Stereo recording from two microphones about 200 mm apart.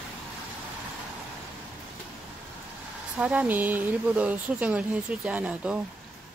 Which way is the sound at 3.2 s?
5° right (ahead or behind).